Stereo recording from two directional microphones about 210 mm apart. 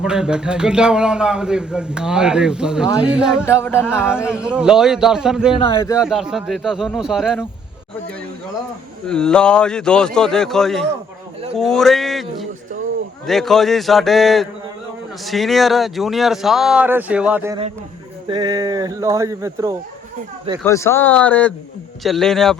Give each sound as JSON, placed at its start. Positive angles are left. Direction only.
{"t": 0.0, "sound": "a man's voice", "side_deg": -5}
{"t": 3.4, "sound": "speech", "side_deg": 10}
{"t": 4.1, "sound": "a man's voice", "side_deg": -5}
{"t": 5.5, "sound": "a man's voice", "side_deg": 25}
{"t": 5.8, "sound": "speech", "side_deg": 15}
{"t": 6.1, "sound": "a man's voice", "side_deg": 0}
{"t": 9.0, "sound": "a man's voice", "side_deg": 5}
{"t": 18.3, "sound": "speech", "side_deg": -20}
{"t": 20.7, "sound": "a man's voice", "side_deg": 15}